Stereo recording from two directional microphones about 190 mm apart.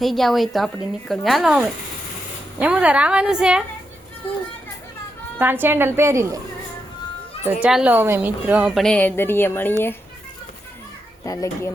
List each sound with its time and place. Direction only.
0.0 s speech: centre (ahead or behind)
5.4 s a woman's voice: 10° right (ahead or behind)
7.4 s speech: 5° right (ahead or behind); by 9.7 s 10° left (ahead or behind)
11.2 s a child's voice: 15° left (ahead or behind)